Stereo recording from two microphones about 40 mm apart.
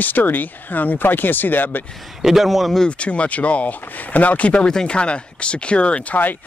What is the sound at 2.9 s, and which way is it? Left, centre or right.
Speech, left.